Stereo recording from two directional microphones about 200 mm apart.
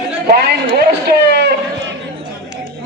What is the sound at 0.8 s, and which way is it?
Speech, 55° right (ahead or behind).